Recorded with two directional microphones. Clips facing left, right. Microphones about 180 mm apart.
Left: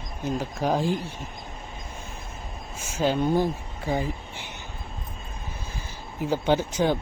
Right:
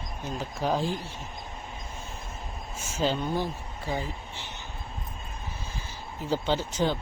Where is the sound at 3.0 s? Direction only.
15° left (ahead or behind).